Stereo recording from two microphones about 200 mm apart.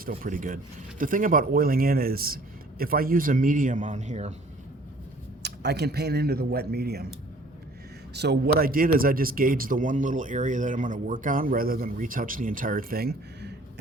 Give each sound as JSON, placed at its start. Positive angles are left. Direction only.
{"t": 0.0, "sound": "speech", "side_deg": -45}
{"t": 5.4, "sound": "speech", "side_deg": -55}
{"t": 8.1, "sound": "speech", "side_deg": -55}